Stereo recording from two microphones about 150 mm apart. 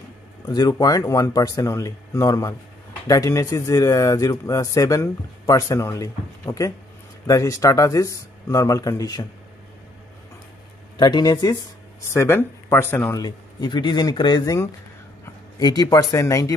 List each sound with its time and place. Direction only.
0.5 s a man's voice: 25° left (ahead or behind)
11.0 s a man's voice: 30° left (ahead or behind)
12.1 s speech: 15° left (ahead or behind)
13.2 s a man's voice: 30° left (ahead or behind)